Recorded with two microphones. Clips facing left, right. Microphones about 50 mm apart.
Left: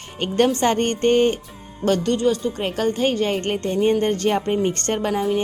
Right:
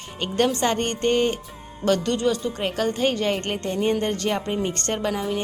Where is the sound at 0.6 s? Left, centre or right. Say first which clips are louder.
Left 4 dB; left; by 4.0 s centre.